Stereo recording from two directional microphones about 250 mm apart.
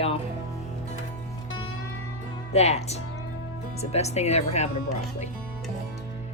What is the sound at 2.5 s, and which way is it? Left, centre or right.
Speech, left.